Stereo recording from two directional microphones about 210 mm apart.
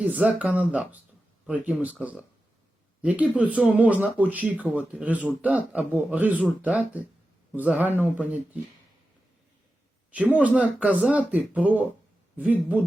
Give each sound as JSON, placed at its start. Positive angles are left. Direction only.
{"t": 0.0, "sound": "speech", "side_deg": -5}
{"t": 10.3, "sound": "speech", "side_deg": -5}